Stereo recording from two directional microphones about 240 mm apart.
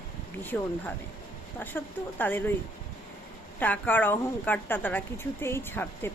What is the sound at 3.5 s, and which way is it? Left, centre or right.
A woman's voice, centre.